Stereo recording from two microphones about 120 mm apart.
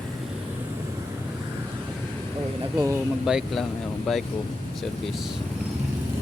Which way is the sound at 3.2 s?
Centre (ahead or behind).